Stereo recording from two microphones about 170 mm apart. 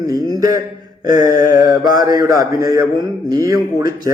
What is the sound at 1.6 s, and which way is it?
A man's voice, 20° right (ahead or behind).